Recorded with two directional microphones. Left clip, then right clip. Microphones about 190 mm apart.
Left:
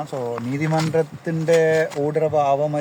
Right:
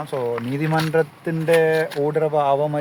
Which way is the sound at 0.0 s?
5° right (ahead or behind).